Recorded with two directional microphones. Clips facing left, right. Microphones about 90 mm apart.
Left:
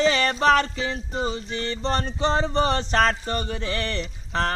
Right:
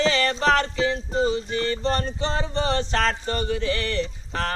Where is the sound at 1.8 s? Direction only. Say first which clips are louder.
Left 1 dB; 25° left (ahead or behind).